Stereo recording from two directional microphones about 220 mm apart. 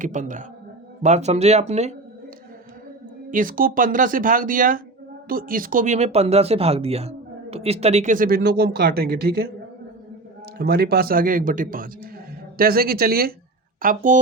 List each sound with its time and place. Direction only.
0.0 s speech: 35° right (ahead or behind)
3.2 s speech: 40° right (ahead or behind)
10.6 s speech: 45° right (ahead or behind)